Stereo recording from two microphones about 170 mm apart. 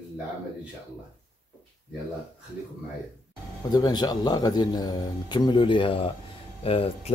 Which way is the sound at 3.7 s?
25° left (ahead or behind).